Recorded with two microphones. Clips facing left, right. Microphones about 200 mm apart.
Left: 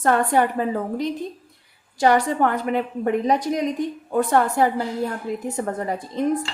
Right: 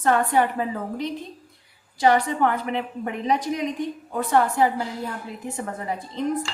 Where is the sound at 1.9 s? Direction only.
50° left (ahead or behind).